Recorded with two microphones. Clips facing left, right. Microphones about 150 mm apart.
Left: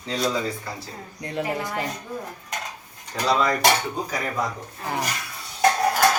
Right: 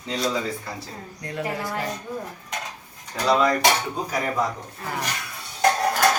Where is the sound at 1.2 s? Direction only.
20° left (ahead or behind).